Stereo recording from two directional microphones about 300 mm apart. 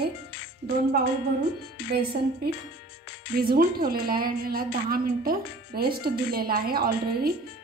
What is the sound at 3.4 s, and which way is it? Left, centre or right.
A woman's voice, right.